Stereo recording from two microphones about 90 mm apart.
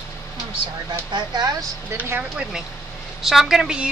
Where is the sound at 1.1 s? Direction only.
50° right (ahead or behind).